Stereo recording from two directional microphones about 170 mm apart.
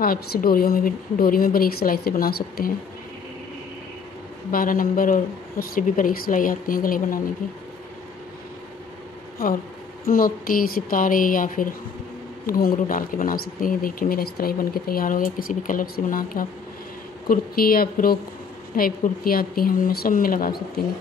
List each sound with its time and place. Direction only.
0.0 s speech: 60° left (ahead or behind)
4.5 s speech: 55° left (ahead or behind)
10.0 s a woman's voice: 55° left (ahead or behind)